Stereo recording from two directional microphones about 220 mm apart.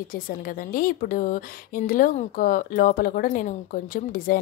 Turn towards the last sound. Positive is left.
turn(degrees=40)  # may be behind; listen again after turning